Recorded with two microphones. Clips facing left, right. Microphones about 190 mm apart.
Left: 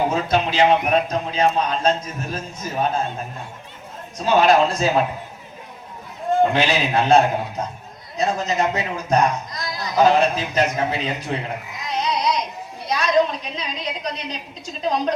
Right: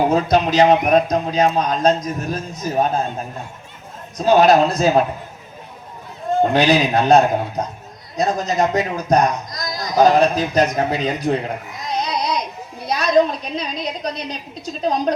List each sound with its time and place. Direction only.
0.1 s a man's voice: 40° right (ahead or behind)
4.3 s a man's voice: 40° right (ahead or behind)
6.5 s a man's voice: 40° right (ahead or behind)
12.8 s a sound: 35° right (ahead or behind)